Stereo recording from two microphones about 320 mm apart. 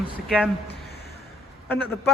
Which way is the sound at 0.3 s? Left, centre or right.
Centre.